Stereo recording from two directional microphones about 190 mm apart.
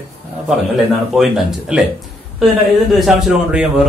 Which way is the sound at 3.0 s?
Centre (ahead or behind).